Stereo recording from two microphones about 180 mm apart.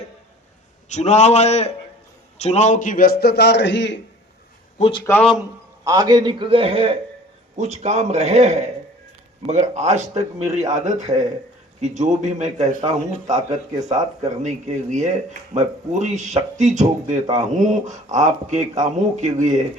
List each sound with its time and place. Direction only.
0.9 s a man's voice: 40° left (ahead or behind); by 4.0 s 75° left (ahead or behind)
4.8 s speech: 30° left (ahead or behind)
5.0 s a man's voice: 10° left (ahead or behind)
5.8 s a man's voice: 20° right (ahead or behind); by 19.6 s 40° right (ahead or behind)